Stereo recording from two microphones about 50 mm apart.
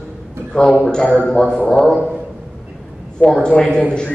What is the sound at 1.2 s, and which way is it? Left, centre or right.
Speech, centre.